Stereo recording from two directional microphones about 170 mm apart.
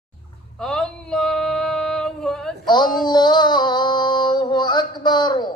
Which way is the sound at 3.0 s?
25° left (ahead or behind).